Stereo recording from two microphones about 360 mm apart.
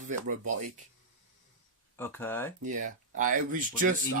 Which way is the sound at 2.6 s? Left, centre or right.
Right.